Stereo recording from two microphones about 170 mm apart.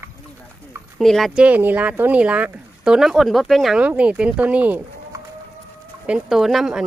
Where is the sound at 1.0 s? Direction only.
Centre (ahead or behind).